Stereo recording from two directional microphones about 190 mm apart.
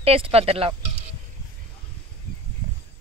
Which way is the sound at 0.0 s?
30° right (ahead or behind).